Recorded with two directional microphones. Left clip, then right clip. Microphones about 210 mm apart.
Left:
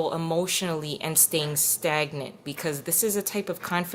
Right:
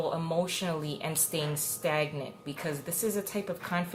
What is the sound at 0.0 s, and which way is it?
A woman's voice, 50° left (ahead or behind).